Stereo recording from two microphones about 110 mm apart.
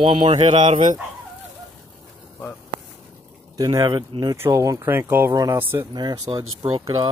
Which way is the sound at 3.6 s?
30° right (ahead or behind).